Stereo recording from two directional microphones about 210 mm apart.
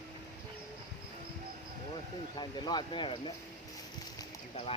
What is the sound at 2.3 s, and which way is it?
Speech, 20° left (ahead or behind).